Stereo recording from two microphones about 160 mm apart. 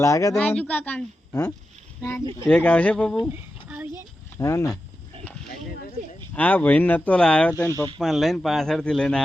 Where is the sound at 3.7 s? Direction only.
15° right (ahead or behind).